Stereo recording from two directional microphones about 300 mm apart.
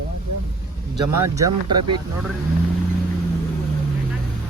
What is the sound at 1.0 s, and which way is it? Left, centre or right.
Speech, centre.